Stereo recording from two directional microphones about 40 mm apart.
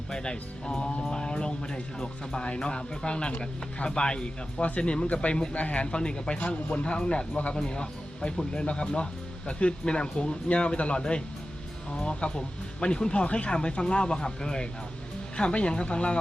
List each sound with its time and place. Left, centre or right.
0.1 s speech: left